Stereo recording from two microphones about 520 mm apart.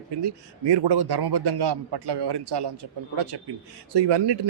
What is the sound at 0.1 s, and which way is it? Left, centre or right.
A man's voice, right.